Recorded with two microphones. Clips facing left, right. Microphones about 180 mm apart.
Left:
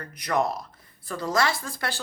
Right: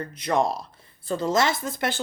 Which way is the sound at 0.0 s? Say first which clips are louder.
Right 2 dB; 25° right (ahead or behind).